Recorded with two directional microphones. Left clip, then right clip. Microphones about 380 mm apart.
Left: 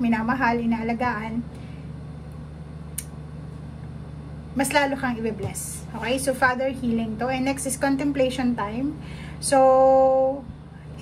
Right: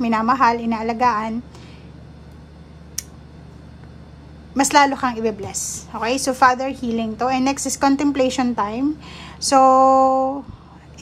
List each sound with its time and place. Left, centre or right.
0.0 s a woman's voice: centre
4.6 s a woman's voice: centre